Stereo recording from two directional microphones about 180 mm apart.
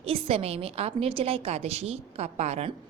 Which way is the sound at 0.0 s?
30° right (ahead or behind).